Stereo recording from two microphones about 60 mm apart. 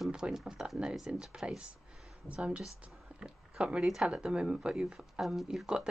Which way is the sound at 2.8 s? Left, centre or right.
Centre.